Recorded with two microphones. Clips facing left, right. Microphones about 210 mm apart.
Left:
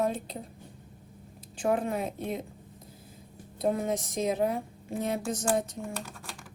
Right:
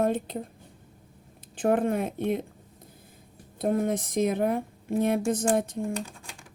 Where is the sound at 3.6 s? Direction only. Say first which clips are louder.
Right 3 dB; 55° right (ahead or behind).